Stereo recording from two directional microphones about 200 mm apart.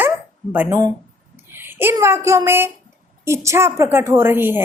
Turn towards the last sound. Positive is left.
turn(degrees=-10)  # may be behind; listen again after turning